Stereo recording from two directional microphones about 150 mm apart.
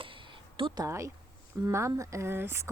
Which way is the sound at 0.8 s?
20° right (ahead or behind).